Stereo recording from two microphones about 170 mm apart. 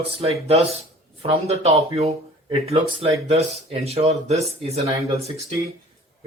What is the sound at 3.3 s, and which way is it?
Speech, 35° right (ahead or behind).